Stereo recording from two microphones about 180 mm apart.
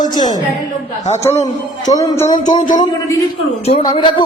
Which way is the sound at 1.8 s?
20° left (ahead or behind).